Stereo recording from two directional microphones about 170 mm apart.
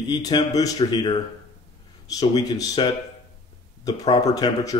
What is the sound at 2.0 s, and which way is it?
Speech, 20° left (ahead or behind).